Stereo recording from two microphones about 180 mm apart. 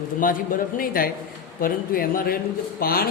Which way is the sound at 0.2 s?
50° left (ahead or behind).